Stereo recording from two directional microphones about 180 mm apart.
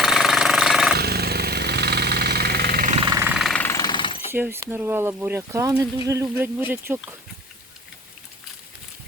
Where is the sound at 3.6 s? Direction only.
20° left (ahead or behind).